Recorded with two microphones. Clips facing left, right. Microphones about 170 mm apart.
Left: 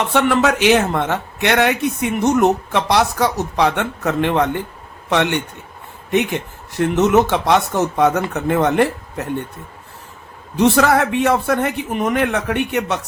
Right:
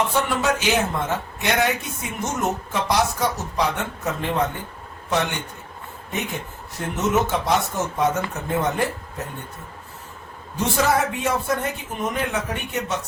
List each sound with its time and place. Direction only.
0.1 s a man's voice: 70° left (ahead or behind)
10.6 s a man's voice: 70° left (ahead or behind)